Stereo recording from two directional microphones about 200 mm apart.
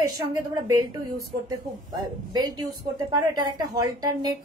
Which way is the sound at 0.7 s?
20° right (ahead or behind).